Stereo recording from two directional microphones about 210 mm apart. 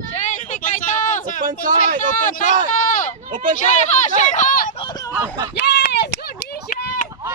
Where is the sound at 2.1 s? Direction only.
40° left (ahead or behind).